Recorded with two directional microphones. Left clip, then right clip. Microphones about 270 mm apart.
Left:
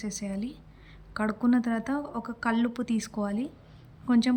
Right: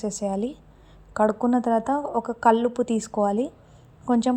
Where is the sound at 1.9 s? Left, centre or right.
Centre.